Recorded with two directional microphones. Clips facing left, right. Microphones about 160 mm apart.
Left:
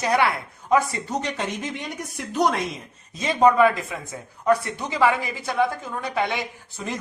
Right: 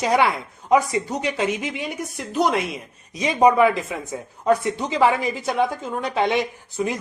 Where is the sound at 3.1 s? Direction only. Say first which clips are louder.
Right 1 dB; 15° right (ahead or behind).